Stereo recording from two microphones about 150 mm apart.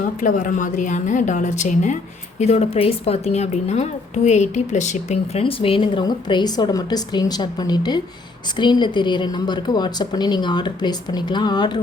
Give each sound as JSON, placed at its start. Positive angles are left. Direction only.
{"t": 0.0, "sound": "a woman's voice", "side_deg": 55}